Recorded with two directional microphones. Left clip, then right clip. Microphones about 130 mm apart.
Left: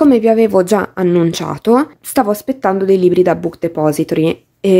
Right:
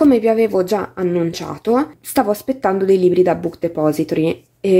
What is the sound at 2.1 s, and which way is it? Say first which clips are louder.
Speech: left 2 dB; 25° left (ahead or behind).